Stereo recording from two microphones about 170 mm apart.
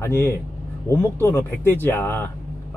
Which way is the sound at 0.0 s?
15° left (ahead or behind).